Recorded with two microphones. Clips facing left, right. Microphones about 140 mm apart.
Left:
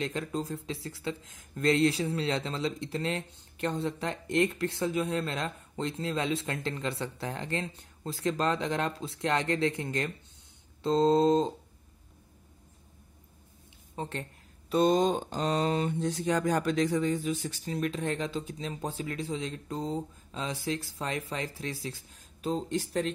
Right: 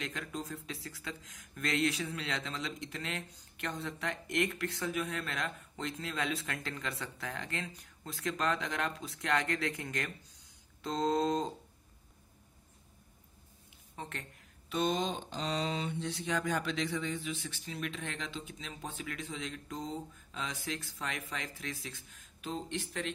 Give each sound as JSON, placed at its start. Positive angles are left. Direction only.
{"t": 0.0, "sound": "speech", "side_deg": 30}
{"t": 10.8, "sound": "a sound", "side_deg": 25}
{"t": 13.9, "sound": "speech", "side_deg": 30}